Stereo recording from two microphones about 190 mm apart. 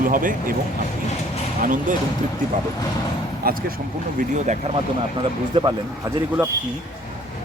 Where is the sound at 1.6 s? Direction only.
45° right (ahead or behind).